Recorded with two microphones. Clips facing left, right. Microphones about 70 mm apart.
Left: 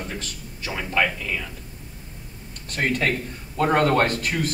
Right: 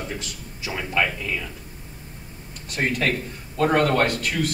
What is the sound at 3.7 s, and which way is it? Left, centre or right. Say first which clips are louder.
Speech: left 1 dB; left.